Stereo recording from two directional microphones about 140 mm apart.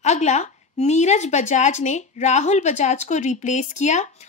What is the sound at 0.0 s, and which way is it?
A woman's voice, 55° left (ahead or behind).